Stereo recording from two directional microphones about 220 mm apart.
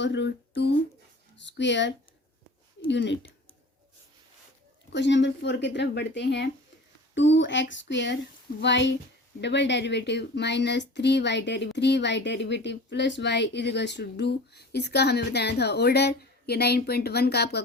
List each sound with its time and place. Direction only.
0.0 s speech: 55° left (ahead or behind)
2.9 s speech: 55° left (ahead or behind)
4.9 s speech: 55° left (ahead or behind)